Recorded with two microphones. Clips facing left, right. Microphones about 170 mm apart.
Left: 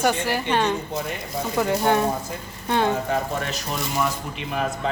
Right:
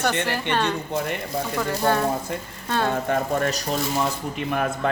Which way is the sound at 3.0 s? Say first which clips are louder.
Right 3 dB; 45° right (ahead or behind).